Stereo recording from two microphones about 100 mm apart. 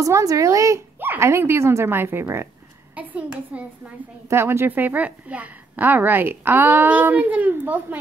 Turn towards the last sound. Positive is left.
turn(degrees=-20)  # may be behind; listen again after turning